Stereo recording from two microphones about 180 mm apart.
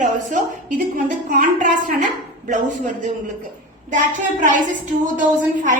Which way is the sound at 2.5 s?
45° right (ahead or behind).